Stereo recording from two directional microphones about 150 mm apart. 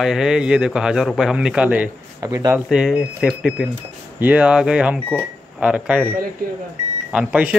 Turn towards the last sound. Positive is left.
turn(degrees=-10)  # may be behind; listen again after turning